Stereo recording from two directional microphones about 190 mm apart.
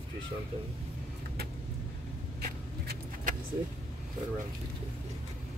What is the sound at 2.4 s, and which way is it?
Vehicle, 50° right (ahead or behind).